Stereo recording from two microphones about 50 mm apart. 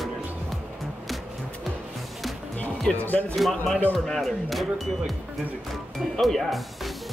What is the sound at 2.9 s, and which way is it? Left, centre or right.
Speech, left.